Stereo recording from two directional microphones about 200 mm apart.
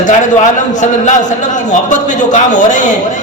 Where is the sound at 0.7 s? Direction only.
40° left (ahead or behind).